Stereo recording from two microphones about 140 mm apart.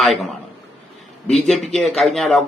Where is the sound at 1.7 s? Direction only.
5° left (ahead or behind).